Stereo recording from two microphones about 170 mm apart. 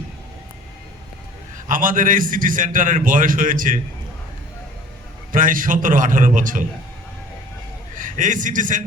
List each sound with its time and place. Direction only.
1.6 s a man's voice: 55° right (ahead or behind)
5.3 s a man's voice: 55° right (ahead or behind)
7.9 s a man's voice: 50° right (ahead or behind)